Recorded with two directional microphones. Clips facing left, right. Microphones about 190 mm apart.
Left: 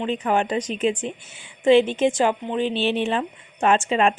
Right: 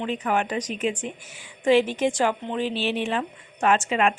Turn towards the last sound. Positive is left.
turn(degrees=30)  # may be behind; listen again after turning